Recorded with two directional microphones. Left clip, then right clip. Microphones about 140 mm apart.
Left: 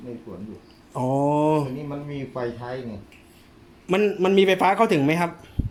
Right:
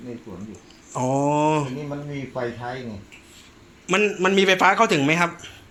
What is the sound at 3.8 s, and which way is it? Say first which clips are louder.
A man's voice: right 1 dB; 25° left (ahead or behind).